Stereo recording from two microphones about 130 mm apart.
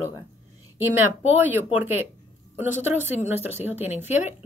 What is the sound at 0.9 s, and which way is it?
A woman's voice, 15° right (ahead or behind).